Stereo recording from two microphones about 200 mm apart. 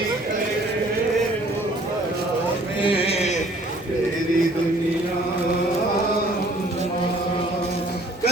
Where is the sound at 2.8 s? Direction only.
25° left (ahead or behind).